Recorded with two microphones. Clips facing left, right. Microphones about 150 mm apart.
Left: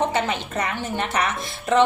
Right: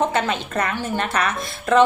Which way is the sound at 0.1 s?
15° left (ahead or behind).